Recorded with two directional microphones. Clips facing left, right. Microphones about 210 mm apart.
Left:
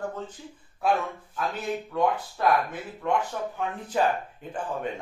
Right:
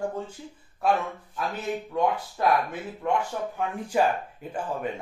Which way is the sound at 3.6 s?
10° right (ahead or behind).